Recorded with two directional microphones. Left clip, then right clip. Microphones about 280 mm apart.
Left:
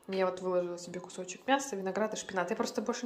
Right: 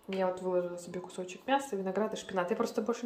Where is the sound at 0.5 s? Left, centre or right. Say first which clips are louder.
Even; centre.